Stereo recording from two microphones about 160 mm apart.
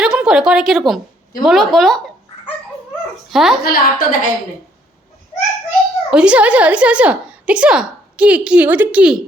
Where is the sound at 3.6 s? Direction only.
65° left (ahead or behind).